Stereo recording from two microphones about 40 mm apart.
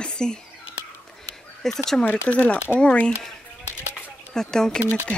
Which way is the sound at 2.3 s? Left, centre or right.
Left.